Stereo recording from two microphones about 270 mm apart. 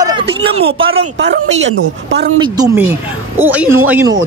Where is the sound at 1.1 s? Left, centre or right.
Right.